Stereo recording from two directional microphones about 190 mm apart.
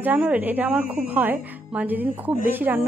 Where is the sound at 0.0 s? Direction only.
10° right (ahead or behind).